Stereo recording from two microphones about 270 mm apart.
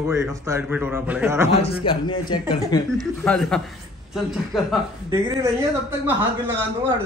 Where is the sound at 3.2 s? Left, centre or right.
Centre.